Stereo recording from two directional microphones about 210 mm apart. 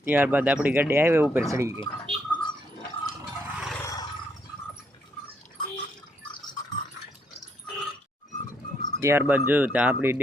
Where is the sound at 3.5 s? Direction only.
Centre (ahead or behind).